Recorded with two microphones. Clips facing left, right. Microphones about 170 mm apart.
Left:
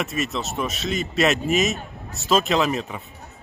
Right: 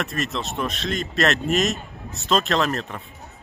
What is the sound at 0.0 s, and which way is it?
Speech, centre (ahead or behind).